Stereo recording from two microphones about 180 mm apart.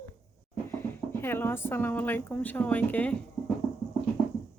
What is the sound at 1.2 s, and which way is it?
Speech, 10° left (ahead or behind).